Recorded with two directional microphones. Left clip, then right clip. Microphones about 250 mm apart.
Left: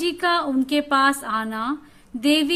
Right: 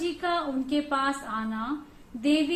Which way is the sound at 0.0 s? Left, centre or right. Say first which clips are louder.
Left 7 dB; left.